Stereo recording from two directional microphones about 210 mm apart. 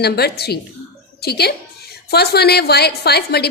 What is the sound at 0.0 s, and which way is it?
A woman's voice, 50° left (ahead or behind).